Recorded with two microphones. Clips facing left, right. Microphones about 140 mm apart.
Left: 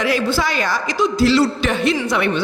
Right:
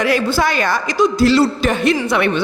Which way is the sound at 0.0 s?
50° right (ahead or behind).